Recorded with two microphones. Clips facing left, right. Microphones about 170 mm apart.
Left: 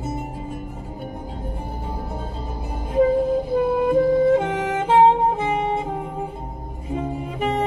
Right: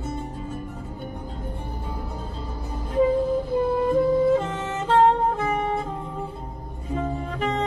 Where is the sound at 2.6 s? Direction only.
15° left (ahead or behind).